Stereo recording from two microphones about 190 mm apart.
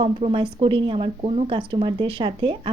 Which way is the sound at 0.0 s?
30° right (ahead or behind).